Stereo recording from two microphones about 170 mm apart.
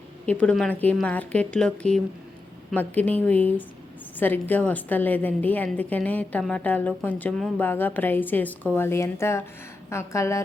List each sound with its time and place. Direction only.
0.3 s a woman's voice: 5° left (ahead or behind)